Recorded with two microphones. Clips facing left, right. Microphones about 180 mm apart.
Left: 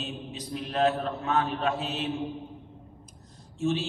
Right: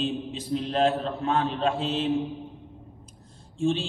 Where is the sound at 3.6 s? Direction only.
30° right (ahead or behind).